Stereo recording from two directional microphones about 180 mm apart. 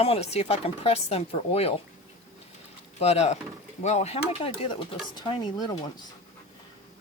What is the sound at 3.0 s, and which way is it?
A woman's voice, 35° left (ahead or behind).